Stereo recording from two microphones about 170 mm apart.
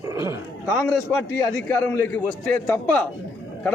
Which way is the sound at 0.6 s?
10° left (ahead or behind).